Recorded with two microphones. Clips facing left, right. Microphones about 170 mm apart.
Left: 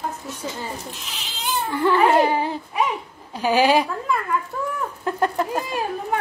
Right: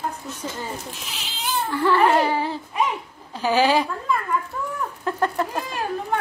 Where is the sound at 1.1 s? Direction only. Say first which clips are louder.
Left 1 dB; centre (ahead or behind).